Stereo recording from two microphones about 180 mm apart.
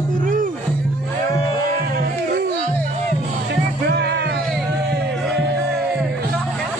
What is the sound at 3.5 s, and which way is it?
Music, 65° right (ahead or behind).